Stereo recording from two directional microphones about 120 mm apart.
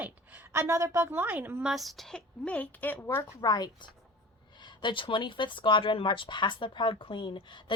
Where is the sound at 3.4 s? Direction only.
35° left (ahead or behind).